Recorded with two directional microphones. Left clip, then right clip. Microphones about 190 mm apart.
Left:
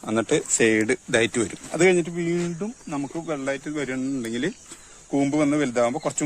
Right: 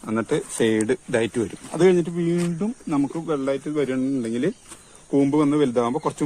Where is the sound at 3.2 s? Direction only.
50° left (ahead or behind).